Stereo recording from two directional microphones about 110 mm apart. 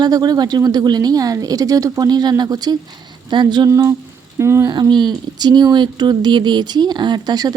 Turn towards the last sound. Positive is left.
turn(degrees=-40)  # may be behind; listen again after turning